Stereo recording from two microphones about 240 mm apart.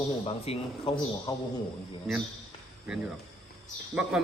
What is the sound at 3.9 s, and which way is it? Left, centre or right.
Speech, centre.